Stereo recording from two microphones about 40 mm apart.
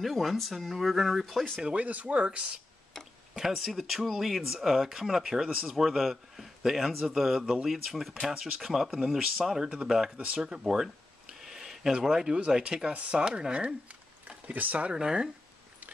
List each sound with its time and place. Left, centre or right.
0.0 s a man's voice: centre
1.8 s speech: right
3.3 s a man's voice: centre
7.4 s speech: centre
7.7 s a man's voice: centre; by 10.6 s right
10.7 s a sound: centre
12.4 s speech: centre
14.5 s speech: right
14.8 s speech: right